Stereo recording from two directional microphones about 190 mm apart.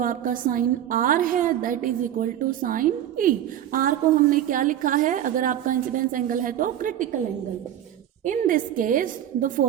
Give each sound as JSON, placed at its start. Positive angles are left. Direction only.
{"t": 0.0, "sound": "a woman's voice", "side_deg": -45}
{"t": 8.2, "sound": "a woman's voice", "side_deg": -45}